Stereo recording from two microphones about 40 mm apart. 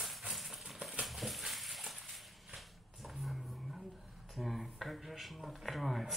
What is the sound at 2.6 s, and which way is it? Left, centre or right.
Dog, centre.